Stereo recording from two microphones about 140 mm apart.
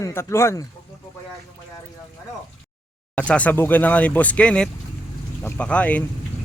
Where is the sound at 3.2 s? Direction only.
10° left (ahead or behind).